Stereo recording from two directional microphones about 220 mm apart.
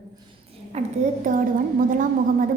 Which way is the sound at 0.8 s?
30° right (ahead or behind).